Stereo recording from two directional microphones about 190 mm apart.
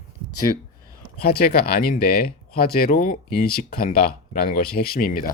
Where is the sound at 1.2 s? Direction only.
50° left (ahead or behind).